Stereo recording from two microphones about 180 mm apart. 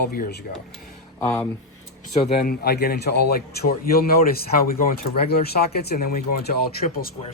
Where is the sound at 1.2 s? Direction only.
10° left (ahead or behind).